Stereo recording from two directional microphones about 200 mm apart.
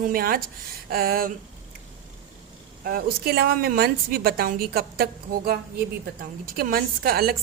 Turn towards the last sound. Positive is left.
turn(degrees=-50)  # may be behind; listen again after turning